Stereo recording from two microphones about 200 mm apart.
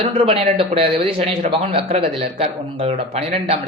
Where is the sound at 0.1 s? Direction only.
30° right (ahead or behind).